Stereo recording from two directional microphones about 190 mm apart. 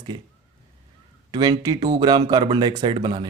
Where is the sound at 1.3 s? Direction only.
20° right (ahead or behind).